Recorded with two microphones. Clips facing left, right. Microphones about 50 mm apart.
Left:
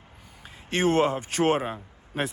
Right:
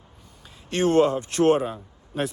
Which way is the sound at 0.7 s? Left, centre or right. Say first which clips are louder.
Right 3 dB; left.